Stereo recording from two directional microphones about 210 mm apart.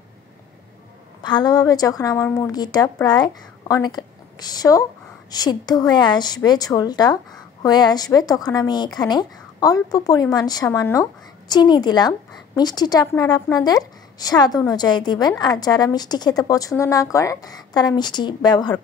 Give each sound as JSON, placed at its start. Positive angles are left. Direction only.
{"t": 1.2, "sound": "a woman's voice", "side_deg": 20}